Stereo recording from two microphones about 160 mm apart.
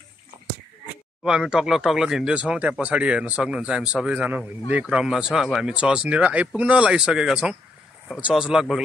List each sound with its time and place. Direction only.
1.2 s speech: 5° right (ahead or behind)